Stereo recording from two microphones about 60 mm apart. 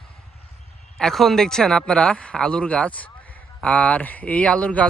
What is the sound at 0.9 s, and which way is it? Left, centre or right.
Speech, centre.